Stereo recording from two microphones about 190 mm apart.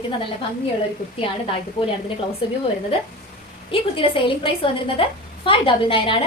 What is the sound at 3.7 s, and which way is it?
A woman's voice, 30° left (ahead or behind).